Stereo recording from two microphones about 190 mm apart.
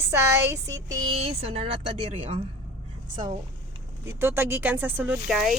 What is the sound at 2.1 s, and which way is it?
Speech, 30° right (ahead or behind).